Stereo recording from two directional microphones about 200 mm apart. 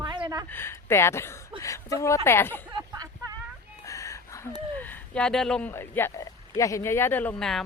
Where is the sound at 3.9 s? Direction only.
15° left (ahead or behind).